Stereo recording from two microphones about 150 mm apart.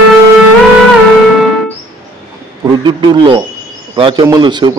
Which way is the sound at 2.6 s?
30° right (ahead or behind).